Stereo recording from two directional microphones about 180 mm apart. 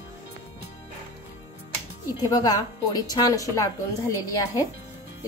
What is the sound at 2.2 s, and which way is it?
Speech, 20° left (ahead or behind).